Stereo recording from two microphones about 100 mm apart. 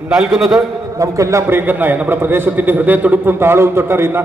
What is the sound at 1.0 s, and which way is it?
A man's voice, 30° right (ahead or behind).